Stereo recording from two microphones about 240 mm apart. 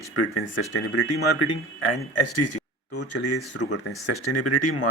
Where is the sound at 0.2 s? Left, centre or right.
Left.